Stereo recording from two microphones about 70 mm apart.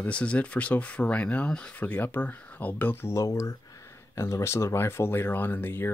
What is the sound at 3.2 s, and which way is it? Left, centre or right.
Speech, left.